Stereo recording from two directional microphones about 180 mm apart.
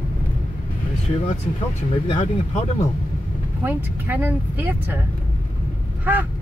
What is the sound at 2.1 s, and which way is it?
Speech, 40° left (ahead or behind).